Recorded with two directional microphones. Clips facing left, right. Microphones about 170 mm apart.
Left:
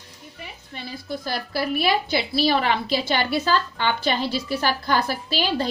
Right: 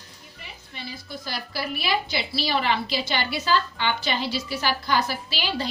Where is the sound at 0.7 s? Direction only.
50° left (ahead or behind).